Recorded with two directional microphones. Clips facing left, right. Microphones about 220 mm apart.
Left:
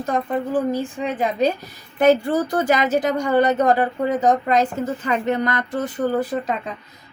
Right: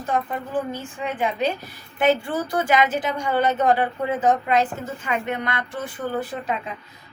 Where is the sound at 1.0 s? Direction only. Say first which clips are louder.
Left 2 dB; 40° left (ahead or behind).